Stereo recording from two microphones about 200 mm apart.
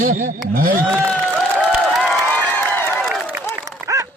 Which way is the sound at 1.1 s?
Centre (ahead or behind).